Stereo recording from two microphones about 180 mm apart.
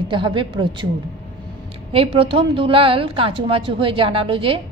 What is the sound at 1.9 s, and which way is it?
A woman's voice, 30° right (ahead or behind).